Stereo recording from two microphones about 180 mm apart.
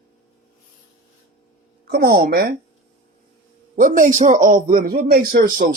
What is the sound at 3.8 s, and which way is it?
A man's voice, 45° right (ahead or behind).